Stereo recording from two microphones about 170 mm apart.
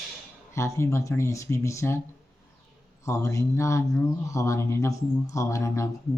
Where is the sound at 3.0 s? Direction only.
15° left (ahead or behind).